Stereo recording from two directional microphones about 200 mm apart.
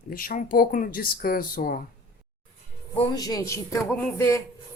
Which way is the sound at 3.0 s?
20° left (ahead or behind).